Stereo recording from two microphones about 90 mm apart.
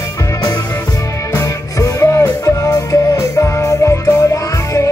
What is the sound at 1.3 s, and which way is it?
Music, 30° left (ahead or behind).